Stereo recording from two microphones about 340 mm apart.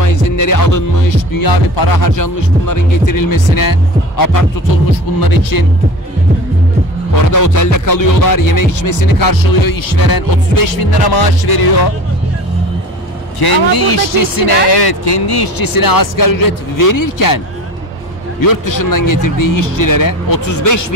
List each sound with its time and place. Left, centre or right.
0.1 s speech: left
5.2 s music: left
7.3 s music: left
13.4 s music: left
18.4 s speech: left